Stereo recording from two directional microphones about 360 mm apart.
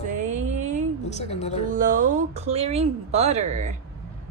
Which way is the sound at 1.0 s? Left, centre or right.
Centre.